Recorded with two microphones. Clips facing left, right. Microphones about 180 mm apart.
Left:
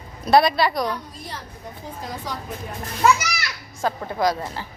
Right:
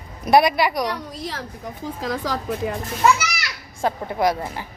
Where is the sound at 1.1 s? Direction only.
90° right.